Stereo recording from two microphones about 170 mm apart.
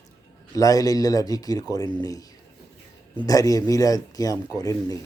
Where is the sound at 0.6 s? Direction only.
20° left (ahead or behind).